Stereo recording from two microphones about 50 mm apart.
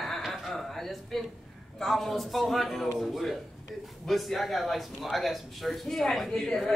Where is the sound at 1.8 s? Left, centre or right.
Centre.